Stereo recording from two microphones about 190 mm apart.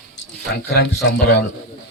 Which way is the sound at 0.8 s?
60° left (ahead or behind).